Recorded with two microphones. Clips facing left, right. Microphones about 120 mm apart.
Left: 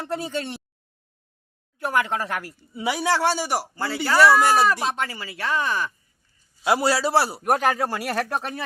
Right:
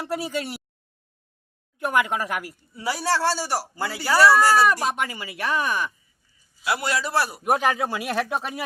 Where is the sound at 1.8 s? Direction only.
20° right (ahead or behind).